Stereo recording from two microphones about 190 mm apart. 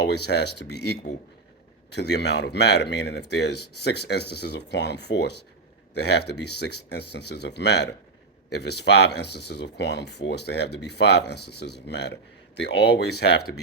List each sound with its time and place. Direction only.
0.0 s a man's voice: 60° left (ahead or behind)